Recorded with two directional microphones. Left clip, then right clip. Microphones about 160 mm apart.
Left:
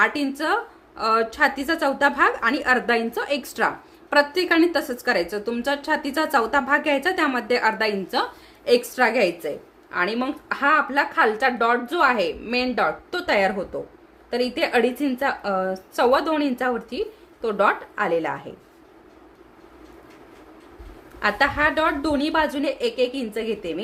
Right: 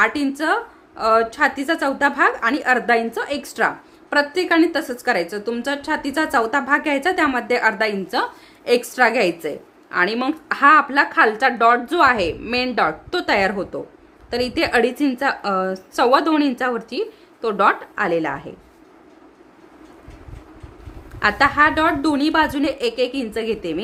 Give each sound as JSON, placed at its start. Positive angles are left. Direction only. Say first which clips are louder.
{"t": 0.0, "sound": "a woman's voice", "louder": "right 3 dB", "side_deg": -25}
{"t": 21.2, "sound": "a woman's voice", "louder": "right 5 dB", "side_deg": -40}